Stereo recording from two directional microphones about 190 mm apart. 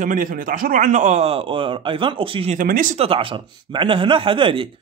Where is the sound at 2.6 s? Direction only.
45° right (ahead or behind).